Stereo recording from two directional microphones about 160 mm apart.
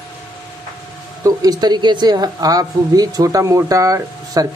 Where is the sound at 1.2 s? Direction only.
25° right (ahead or behind).